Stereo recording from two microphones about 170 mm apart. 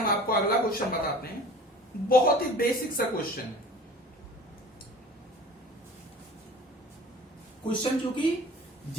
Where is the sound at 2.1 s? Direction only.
60° left (ahead or behind).